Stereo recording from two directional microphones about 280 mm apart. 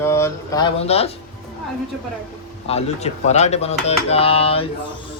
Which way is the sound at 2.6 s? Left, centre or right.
Left.